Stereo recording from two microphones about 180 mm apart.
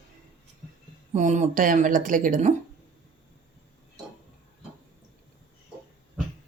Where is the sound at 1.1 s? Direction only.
40° right (ahead or behind).